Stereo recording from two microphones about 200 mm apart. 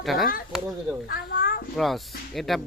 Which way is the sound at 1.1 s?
45° left (ahead or behind).